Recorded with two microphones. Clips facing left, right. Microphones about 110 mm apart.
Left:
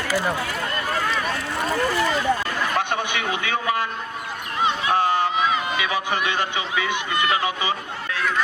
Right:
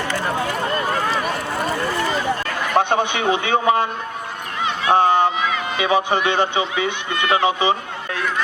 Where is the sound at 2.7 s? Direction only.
25° right (ahead or behind).